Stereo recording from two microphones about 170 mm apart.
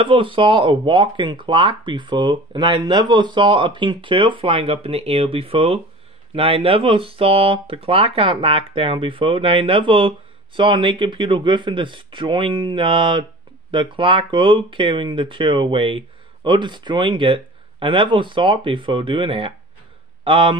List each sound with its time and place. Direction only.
0.0 s speech: 30° right (ahead or behind)